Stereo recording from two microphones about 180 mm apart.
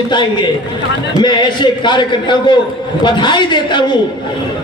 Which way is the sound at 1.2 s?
25° left (ahead or behind).